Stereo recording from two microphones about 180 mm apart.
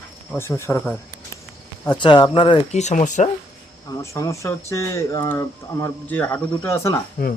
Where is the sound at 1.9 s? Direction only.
25° left (ahead or behind); by 3.3 s 40° left (ahead or behind).